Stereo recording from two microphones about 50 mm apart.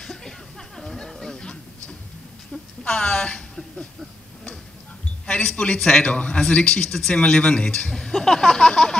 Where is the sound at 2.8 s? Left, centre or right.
Left.